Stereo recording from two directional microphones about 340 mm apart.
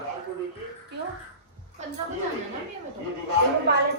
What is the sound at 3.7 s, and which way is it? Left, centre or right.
Speech, right.